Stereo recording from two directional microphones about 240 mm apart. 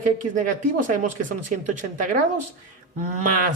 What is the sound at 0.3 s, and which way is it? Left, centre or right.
Speech, right.